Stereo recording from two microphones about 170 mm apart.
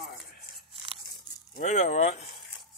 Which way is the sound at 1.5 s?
45° left (ahead or behind).